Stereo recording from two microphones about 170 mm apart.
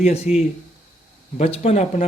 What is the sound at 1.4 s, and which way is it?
Speech, 35° left (ahead or behind).